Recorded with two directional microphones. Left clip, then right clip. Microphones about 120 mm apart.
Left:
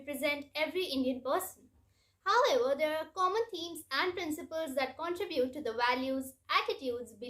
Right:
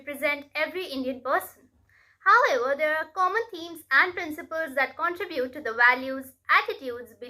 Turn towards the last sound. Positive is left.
turn(degrees=40)  # may be behind; listen again after turning